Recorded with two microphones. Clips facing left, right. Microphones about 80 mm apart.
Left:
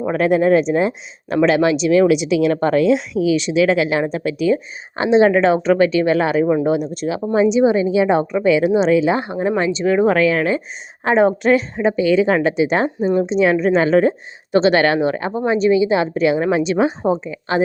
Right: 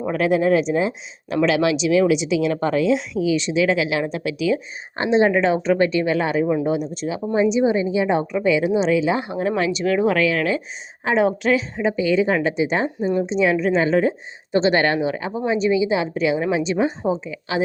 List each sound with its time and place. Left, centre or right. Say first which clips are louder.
0.1 s a woman's voice: left 3 dB; left
2.6 s a woman's voice: left 4 dB; left
3.8 s a woman's voice: left 4 dB; left
4.9 s a woman's voice: left 4 dB; left
7.5 s a woman's voice: left 4 dB; left
9.4 s a woman's voice: left 3 dB; left
17.0 s speech: left 4 dB; left